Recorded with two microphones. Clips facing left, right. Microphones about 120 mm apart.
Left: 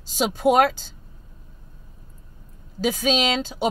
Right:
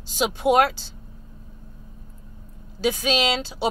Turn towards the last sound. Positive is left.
turn(degrees=45)  # may be behind; listen again after turning